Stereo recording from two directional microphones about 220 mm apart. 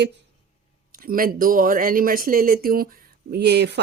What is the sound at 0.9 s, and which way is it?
Speech, 40° right (ahead or behind).